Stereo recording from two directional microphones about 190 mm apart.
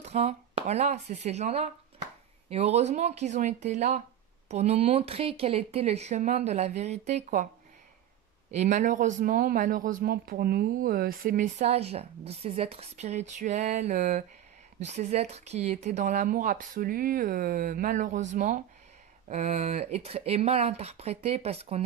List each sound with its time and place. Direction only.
0.0 s speech: 35° right (ahead or behind)
8.5 s speech: 35° right (ahead or behind)